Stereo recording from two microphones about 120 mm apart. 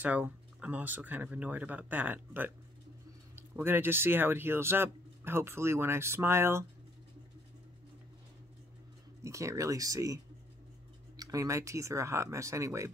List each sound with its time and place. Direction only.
0.0 s speech: 15° right (ahead or behind)
9.2 s speech: 25° right (ahead or behind)